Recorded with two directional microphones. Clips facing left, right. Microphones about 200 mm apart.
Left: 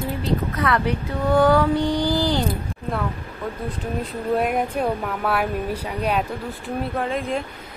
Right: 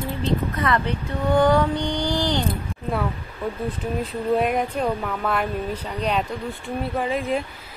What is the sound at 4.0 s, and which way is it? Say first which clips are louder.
Speech: right 1 dB; centre (ahead or behind).